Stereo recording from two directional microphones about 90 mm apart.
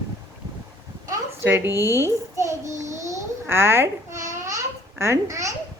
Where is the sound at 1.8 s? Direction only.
30° right (ahead or behind).